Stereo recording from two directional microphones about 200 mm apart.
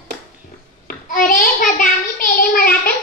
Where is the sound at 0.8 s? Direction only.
45° left (ahead or behind).